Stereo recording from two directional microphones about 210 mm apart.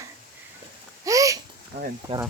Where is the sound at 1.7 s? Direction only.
35° right (ahead or behind).